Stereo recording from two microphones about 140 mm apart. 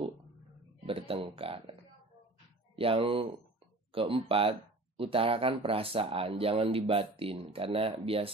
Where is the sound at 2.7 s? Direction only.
40° right (ahead or behind).